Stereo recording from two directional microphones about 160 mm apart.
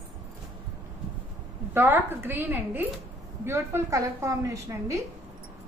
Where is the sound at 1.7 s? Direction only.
15° right (ahead or behind).